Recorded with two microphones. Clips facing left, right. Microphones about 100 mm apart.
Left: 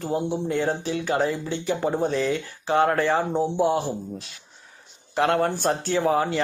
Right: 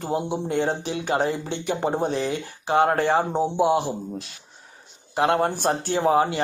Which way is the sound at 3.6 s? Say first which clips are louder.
Right 3 dB; 15° right (ahead or behind).